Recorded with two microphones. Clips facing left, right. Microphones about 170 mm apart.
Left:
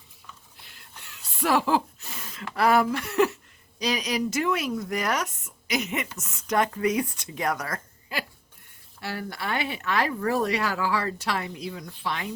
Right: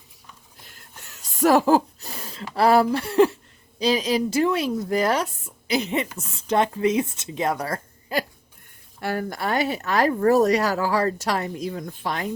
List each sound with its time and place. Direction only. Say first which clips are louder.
0.6 s a sound: right 3 dB; 45° right (ahead or behind)
3.8 s speech: right 6 dB; 30° right (ahead or behind)
9.0 s speech: right 7 dB; 50° right (ahead or behind)